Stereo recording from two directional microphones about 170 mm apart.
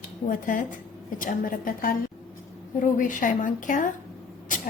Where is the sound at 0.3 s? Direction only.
50° left (ahead or behind).